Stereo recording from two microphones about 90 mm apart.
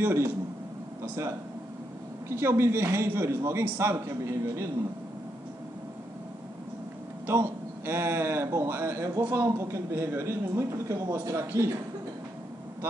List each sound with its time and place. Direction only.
0.0 s a man's voice: 30° right (ahead or behind)
7.2 s a man's voice: 25° right (ahead or behind)